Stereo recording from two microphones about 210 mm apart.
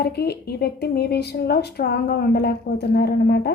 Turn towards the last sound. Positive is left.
turn(degrees=50)  # may be behind; listen again after turning